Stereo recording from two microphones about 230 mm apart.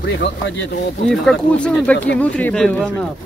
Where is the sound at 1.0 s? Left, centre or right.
Centre.